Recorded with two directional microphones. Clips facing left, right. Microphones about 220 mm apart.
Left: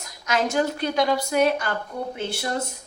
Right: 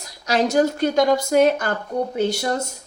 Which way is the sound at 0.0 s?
35° right (ahead or behind).